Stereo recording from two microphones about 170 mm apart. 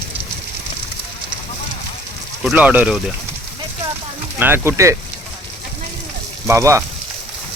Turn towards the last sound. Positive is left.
turn(degrees=-15)  # may be behind; listen again after turning